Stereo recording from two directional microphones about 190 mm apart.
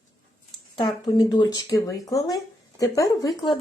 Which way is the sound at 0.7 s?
25° left (ahead or behind).